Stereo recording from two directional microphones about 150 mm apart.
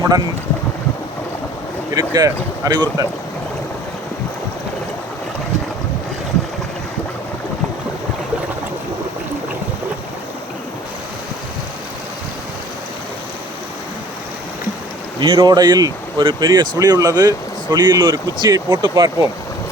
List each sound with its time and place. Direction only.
2.0 s speech: 25° right (ahead or behind)
15.2 s speech: 30° right (ahead or behind)